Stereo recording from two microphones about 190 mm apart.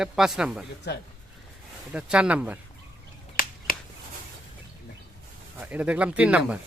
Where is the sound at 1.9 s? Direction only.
5° right (ahead or behind).